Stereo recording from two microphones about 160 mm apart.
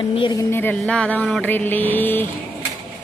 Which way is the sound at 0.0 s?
30° left (ahead or behind).